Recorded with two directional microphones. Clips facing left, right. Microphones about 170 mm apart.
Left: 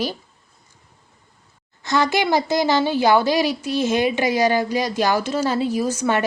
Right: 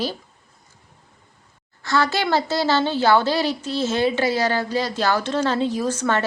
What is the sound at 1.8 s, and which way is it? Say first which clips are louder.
A child's voice: left 2 dB; 20° left (ahead or behind).